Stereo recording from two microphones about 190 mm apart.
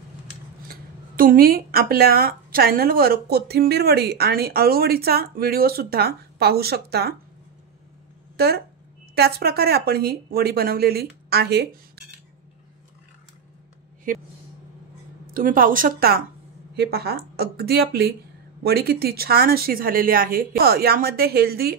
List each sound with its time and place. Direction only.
0.7 s speech: 50° right (ahead or behind)
8.4 s speech: 55° right (ahead or behind)
15.3 s speech: 45° right (ahead or behind)